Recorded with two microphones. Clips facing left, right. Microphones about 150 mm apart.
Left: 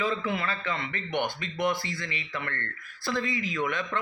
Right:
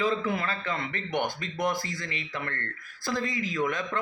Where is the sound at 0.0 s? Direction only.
45° right (ahead or behind).